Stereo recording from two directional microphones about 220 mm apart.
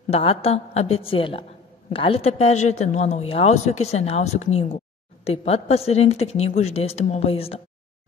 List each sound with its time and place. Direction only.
0.1 s speech: 25° left (ahead or behind)